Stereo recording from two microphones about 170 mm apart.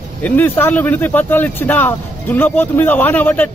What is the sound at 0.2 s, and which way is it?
Speech, 10° left (ahead or behind).